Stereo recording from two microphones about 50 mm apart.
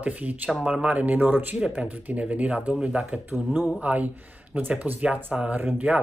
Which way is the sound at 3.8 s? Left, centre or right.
Right.